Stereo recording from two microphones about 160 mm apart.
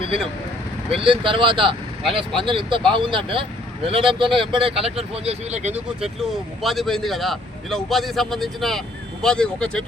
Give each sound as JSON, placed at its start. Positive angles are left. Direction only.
{"t": 0.0, "sound": "speech", "side_deg": -35}
{"t": 6.6, "sound": "a man's voice", "side_deg": 0}